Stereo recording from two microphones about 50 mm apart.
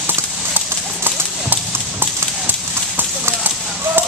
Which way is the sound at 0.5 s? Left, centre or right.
Right.